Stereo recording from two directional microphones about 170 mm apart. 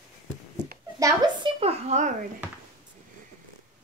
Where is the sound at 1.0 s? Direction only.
20° right (ahead or behind).